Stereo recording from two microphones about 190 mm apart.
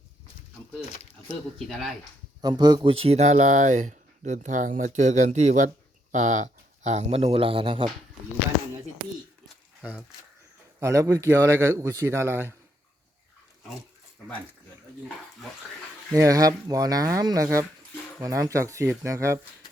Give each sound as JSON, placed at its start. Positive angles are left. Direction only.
{"t": 1.5, "sound": "speech", "side_deg": 0}
{"t": 2.4, "sound": "speech", "side_deg": -20}
{"t": 10.8, "sound": "a man's voice", "side_deg": -15}
{"t": 16.1, "sound": "a man's voice", "side_deg": -15}